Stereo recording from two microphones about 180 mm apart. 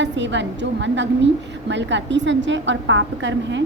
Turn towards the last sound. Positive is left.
turn(degrees=-90)